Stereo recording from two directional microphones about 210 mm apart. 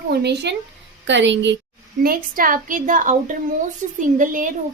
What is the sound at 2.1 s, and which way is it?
A woman's voice, 40° right (ahead or behind).